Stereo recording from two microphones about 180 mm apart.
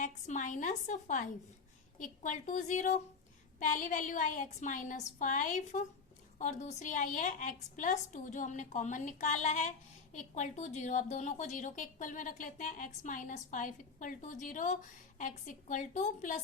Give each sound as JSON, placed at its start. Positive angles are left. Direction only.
{"t": 0.0, "sound": "a woman's voice", "side_deg": 40}